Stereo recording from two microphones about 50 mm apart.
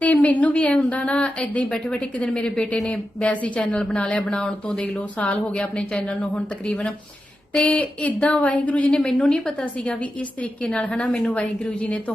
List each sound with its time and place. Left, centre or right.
0.0 s a woman's voice: left
4.4 s a woman's voice: centre
5.1 s a woman's voice: left
9.0 s a woman's voice: centre